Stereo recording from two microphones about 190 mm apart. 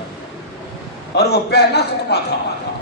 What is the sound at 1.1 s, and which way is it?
A man's voice, 60° left (ahead or behind).